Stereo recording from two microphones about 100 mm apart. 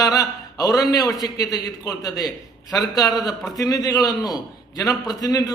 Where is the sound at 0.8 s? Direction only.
40° left (ahead or behind).